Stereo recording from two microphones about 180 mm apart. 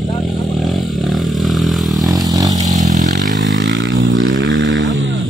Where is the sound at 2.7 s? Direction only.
40° right (ahead or behind).